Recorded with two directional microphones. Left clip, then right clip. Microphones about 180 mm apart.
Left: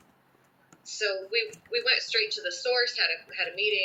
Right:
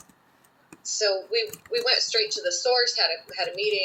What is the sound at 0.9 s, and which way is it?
Speech, 10° right (ahead or behind).